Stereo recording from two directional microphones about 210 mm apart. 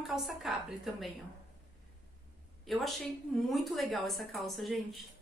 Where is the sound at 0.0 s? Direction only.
Centre (ahead or behind).